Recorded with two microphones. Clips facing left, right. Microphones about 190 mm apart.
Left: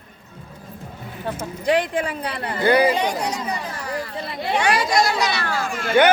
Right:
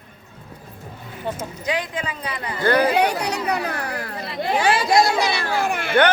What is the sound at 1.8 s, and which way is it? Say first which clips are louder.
Speech: left 5 dB; 60° left (ahead or behind).